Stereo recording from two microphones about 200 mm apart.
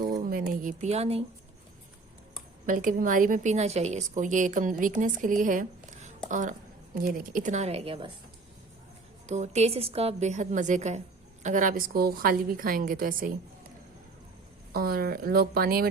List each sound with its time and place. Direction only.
0.3 s a woman's voice: 40° right (ahead or behind)
2.6 s a woman's voice: 40° right (ahead or behind); by 8.1 s 25° right (ahead or behind)
9.2 s a woman's voice: 35° right (ahead or behind)
14.7 s a woman's voice: 50° right (ahead or behind)